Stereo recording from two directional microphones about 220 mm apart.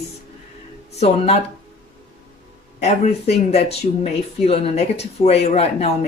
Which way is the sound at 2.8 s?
30° left (ahead or behind).